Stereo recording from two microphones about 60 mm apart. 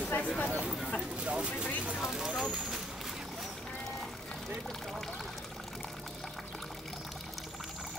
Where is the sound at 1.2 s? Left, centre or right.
Centre.